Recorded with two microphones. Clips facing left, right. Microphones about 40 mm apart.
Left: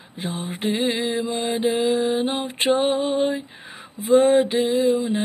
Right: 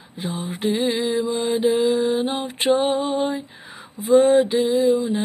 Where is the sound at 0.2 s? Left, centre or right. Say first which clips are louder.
Right 1 dB; left.